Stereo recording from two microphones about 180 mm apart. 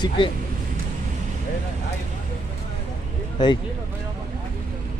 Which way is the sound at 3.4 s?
25° left (ahead or behind).